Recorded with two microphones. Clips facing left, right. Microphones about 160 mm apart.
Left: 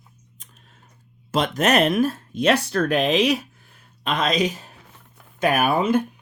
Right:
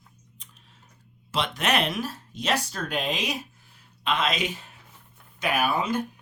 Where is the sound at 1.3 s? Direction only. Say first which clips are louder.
Left 7 dB; 45° left (ahead or behind); by 3.3 s 75° left (ahead or behind).